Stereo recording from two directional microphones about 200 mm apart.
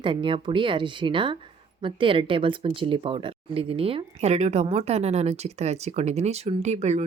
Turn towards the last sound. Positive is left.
turn(degrees=-35)  # may be behind; listen again after turning